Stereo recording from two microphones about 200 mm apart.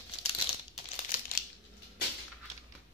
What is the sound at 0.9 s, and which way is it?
Crumpling, 45° left (ahead or behind).